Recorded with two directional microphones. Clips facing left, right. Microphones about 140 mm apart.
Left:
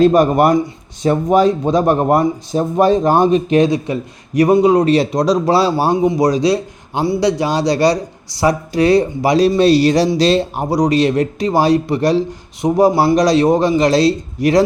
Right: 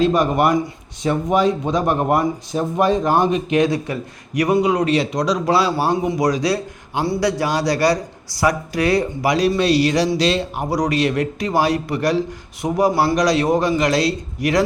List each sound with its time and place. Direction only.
0.0 s speech: 40° left (ahead or behind)
3.9 s speech: 20° left (ahead or behind)